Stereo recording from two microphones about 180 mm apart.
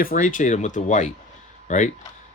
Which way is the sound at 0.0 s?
50° left (ahead or behind).